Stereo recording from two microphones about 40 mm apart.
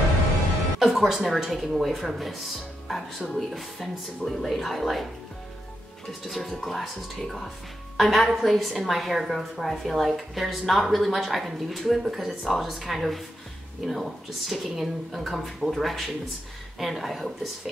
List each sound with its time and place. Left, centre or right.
0.7 s speech: centre
4.2 s speech: centre
6.2 s speech: centre